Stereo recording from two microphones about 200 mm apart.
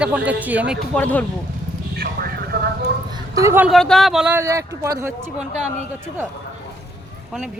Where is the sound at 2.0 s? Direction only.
50° right (ahead or behind).